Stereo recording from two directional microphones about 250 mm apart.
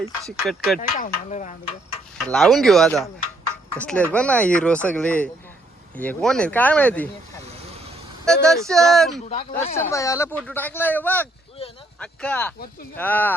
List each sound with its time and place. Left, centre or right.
0.0 s speech: centre
0.4 s speech: centre
0.8 s speech: left
2.2 s speech: centre
3.5 s a sound: centre
4.1 s speech: centre
8.2 s speech: centre
9.2 s speech: left
9.7 s speech: centre